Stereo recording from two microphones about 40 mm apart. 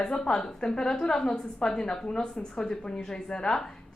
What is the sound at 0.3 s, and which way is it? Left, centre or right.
A woman's voice, centre.